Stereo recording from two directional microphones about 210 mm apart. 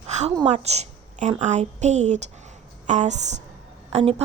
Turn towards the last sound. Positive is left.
turn(degrees=-30)  # may be behind; listen again after turning